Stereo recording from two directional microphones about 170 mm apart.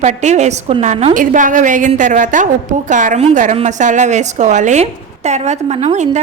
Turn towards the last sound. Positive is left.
turn(degrees=-40)  # may be behind; listen again after turning